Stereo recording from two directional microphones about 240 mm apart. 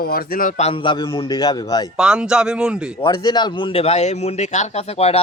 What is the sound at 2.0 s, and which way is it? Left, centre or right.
Speech, centre.